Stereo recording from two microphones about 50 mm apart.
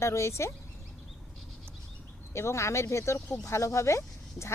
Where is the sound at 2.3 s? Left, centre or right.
Left.